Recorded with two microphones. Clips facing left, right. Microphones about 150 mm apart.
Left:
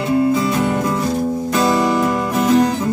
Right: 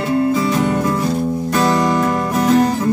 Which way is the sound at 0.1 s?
5° left (ahead or behind).